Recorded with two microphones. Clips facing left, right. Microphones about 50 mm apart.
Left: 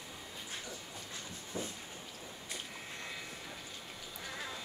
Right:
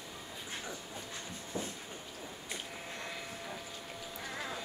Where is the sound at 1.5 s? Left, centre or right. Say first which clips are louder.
Right 1 dB; right.